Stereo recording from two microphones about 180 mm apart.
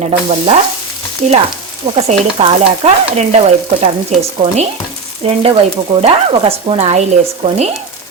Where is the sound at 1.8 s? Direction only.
35° right (ahead or behind).